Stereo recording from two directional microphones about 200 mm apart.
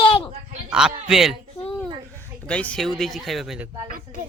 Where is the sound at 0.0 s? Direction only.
25° left (ahead or behind).